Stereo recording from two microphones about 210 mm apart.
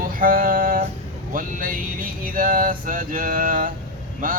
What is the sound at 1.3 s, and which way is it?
Speech, 40° right (ahead or behind).